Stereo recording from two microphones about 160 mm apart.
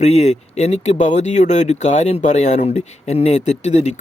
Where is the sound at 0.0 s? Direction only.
45° left (ahead or behind).